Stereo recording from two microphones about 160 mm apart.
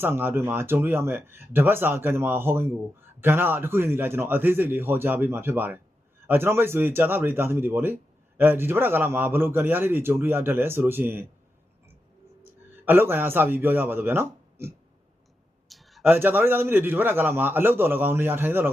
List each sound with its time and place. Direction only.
0.0 s a man's voice: 15° right (ahead or behind)
12.4 s a man's voice: 15° right (ahead or behind)
15.7 s a sound: centre (ahead or behind)
16.0 s a man's voice: 15° right (ahead or behind)